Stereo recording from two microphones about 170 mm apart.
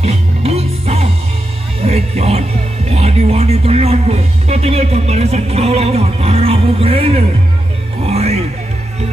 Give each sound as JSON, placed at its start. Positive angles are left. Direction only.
{"t": 0.0, "sound": "music", "side_deg": -35}
{"t": 2.9, "sound": "speech", "side_deg": -40}
{"t": 8.0, "sound": "music", "side_deg": -40}